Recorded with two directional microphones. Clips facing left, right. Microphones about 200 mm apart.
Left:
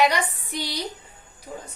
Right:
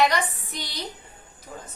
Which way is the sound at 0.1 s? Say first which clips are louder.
Even; 10° left (ahead or behind).